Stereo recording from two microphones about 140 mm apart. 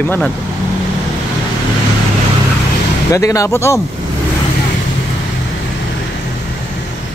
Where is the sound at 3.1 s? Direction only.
25° left (ahead or behind).